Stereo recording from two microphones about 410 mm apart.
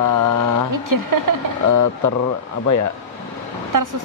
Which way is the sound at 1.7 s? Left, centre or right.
Left.